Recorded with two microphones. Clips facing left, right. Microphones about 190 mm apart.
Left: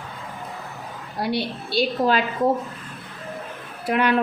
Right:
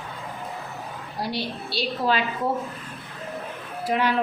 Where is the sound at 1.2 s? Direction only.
55° left (ahead or behind).